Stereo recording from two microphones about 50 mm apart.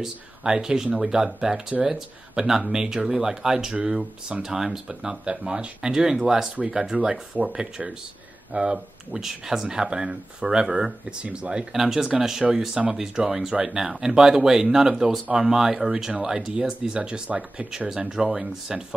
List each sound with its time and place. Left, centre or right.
0.0 s speech: centre
11.7 s speech: centre; by 17.6 s right
17.6 s speech: centre